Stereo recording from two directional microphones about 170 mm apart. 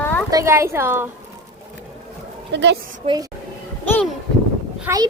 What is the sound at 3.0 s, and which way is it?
Speech, 25° right (ahead or behind).